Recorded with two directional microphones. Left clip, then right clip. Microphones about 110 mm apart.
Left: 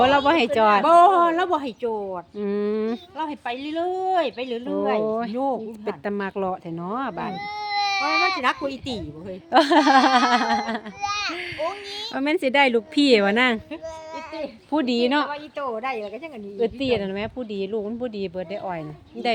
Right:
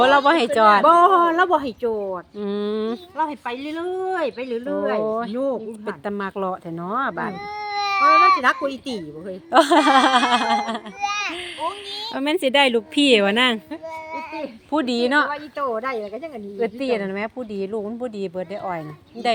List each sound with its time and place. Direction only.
0.3 s speech: 25° left (ahead or behind)
0.9 s speech: centre (ahead or behind); by 2.2 s 15° right (ahead or behind)
2.4 s speech: 30° left (ahead or behind)
3.2 s speech: 20° left (ahead or behind)
5.0 s speech: 40° left (ahead or behind)
5.4 s speech: 30° left (ahead or behind)
7.9 s speech: 10° left (ahead or behind)
9.5 s speech: 30° left (ahead or behind)
12.1 s speech: 20° left (ahead or behind)
14.7 s speech: 25° left (ahead or behind)
15.3 s speech: centre (ahead or behind)
16.6 s speech: 25° left (ahead or behind)